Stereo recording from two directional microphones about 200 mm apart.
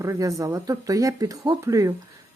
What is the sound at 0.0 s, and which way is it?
Speech, 15° right (ahead or behind).